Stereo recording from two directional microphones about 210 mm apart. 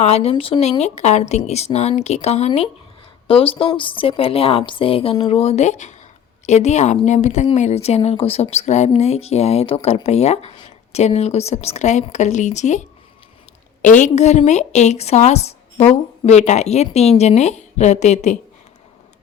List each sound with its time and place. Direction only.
0.0 s a woman's voice: 30° left (ahead or behind)
13.8 s a woman's voice: 35° left (ahead or behind)